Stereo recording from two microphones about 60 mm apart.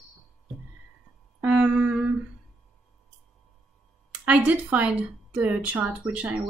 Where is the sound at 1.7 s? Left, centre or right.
Centre.